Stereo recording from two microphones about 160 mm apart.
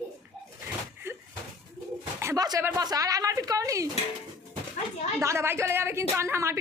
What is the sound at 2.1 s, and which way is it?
A woman's voice, 20° right (ahead or behind).